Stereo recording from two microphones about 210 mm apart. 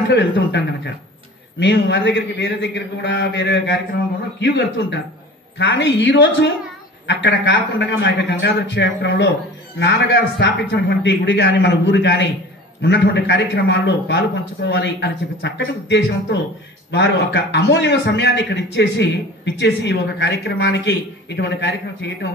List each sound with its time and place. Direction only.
0.1 s a man's voice: 55° left (ahead or behind)
7.2 s a man's voice: 55° left (ahead or behind)